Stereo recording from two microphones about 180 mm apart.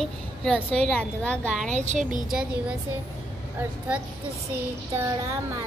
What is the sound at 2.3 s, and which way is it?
Speech, 5° right (ahead or behind).